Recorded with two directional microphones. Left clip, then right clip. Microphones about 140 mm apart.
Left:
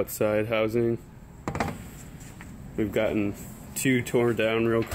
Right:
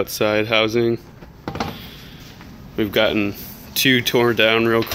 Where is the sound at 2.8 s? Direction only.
10° right (ahead or behind).